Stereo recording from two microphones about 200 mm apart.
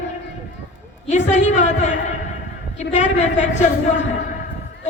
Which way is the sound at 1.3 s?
35° left (ahead or behind).